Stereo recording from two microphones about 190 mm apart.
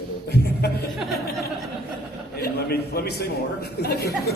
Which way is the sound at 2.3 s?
55° left (ahead or behind).